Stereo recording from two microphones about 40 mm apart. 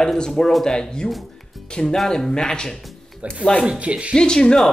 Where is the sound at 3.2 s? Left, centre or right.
Right.